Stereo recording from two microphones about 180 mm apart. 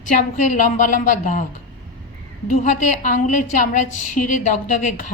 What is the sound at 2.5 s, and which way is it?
A woman's voice, 45° left (ahead or behind).